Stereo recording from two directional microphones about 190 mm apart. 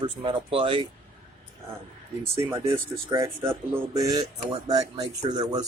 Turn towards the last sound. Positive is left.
turn(degrees=-20)  # may be behind; listen again after turning